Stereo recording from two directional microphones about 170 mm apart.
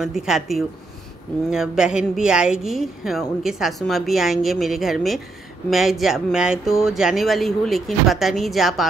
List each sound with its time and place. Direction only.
0.0 s speech: centre (ahead or behind)